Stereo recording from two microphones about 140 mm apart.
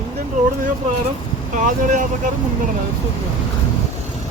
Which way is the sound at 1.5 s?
65° right (ahead or behind).